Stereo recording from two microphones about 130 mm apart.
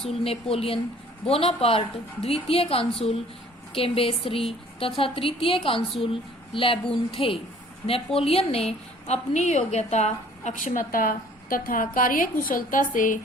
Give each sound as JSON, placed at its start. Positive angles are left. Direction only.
{"t": 0.0, "sound": "a woman's voice", "side_deg": 45}
{"t": 9.3, "sound": "a woman's voice", "side_deg": 65}